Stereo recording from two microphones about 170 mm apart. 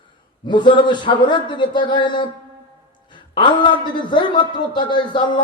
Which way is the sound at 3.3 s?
30° left (ahead or behind).